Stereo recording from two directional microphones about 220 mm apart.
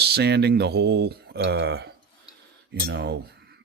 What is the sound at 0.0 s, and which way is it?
Speech, 50° right (ahead or behind).